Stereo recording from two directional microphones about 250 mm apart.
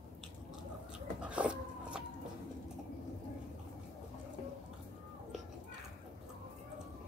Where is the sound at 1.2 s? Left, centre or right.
Centre.